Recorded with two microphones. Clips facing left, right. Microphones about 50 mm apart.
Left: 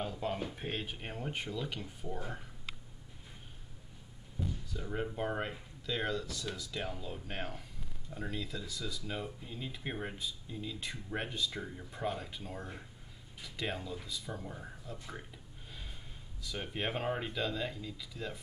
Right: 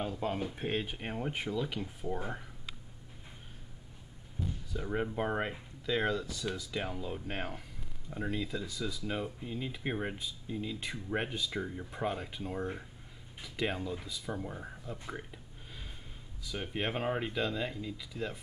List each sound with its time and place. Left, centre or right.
0.0 s speech: centre
2.0 s speech: centre
4.6 s speech: centre